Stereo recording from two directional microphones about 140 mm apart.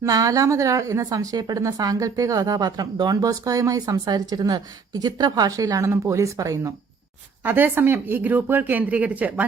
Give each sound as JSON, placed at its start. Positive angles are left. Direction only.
{"t": 0.0, "sound": "a woman's voice", "side_deg": -25}